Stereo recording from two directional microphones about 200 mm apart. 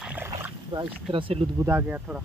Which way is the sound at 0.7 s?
25° right (ahead or behind).